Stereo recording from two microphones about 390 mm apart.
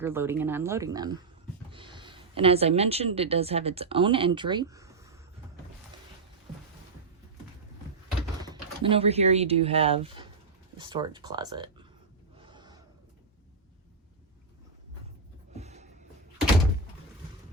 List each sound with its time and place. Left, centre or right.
0.0 s a woman's voice: centre
8.4 s speech: centre
12.4 s gasp: centre
15.5 s music: centre